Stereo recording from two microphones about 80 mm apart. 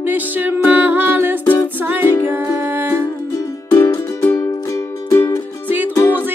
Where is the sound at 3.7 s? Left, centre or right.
Left.